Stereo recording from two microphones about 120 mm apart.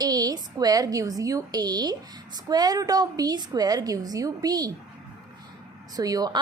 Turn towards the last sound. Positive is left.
turn(degrees=-30)  # may be behind; listen again after turning